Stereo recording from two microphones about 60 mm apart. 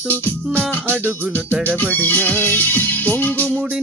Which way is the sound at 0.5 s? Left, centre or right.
Right.